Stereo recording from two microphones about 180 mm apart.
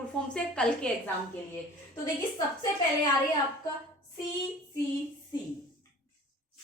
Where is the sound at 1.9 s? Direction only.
20° left (ahead or behind).